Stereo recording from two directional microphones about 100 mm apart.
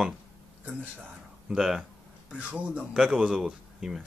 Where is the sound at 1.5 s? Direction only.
5° right (ahead or behind).